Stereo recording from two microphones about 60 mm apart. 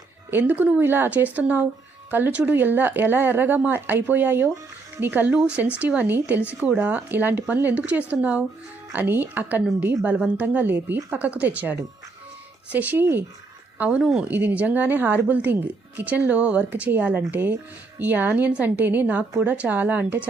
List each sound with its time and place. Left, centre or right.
0.3 s speech: right
2.3 s a woman's voice: right
2.6 s speech: right
5.8 s a woman's voice: right
6.1 s a woman's voice: right
8.9 s a woman's voice: right